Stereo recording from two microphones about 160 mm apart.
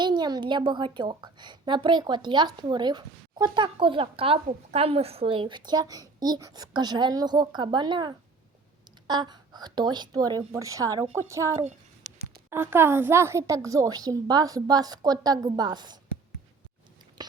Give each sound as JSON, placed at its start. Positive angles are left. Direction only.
{"t": 0.0, "sound": "a woman's voice", "side_deg": -30}